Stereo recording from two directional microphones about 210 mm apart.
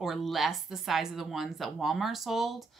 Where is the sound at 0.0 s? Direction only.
Centre (ahead or behind).